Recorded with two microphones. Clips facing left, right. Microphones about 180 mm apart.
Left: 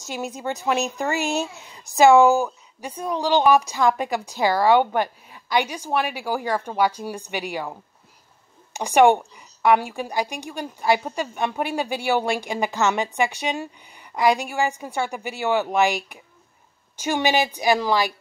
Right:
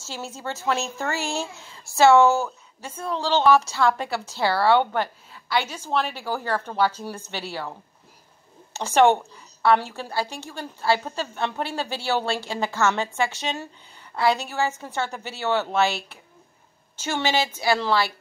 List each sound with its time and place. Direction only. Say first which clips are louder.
0.0 s speech: left 4 dB; 15° left (ahead or behind)
8.7 s speech: left 2 dB; 15° left (ahead or behind)